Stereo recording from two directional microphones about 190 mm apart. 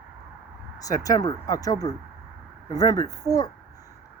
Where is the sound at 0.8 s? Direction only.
20° left (ahead or behind).